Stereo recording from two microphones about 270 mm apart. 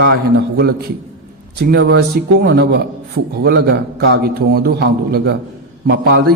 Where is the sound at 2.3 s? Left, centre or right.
Right.